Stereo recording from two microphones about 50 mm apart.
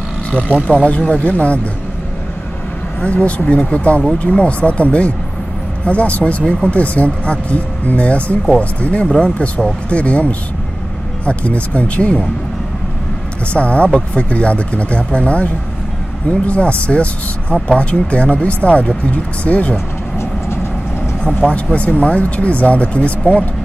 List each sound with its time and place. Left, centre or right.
0.8 s speech: left
3.0 s speech: left
9.0 s speech: centre
13.5 s speech: left
21.4 s speech: left